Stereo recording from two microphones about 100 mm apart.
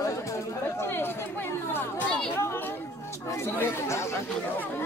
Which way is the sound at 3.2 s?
25° left (ahead or behind).